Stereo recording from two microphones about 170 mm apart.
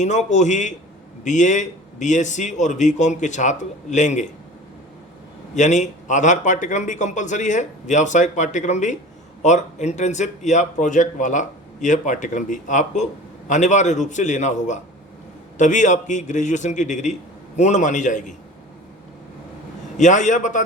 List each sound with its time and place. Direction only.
0.0 s a man's voice: 45° left (ahead or behind)
5.5 s a man's voice: 45° left (ahead or behind)
20.0 s a man's voice: 45° left (ahead or behind)